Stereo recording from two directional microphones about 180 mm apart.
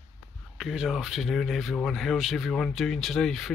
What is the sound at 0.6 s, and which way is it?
Speech, centre (ahead or behind).